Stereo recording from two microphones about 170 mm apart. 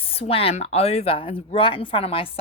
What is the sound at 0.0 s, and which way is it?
Speech, 35° left (ahead or behind).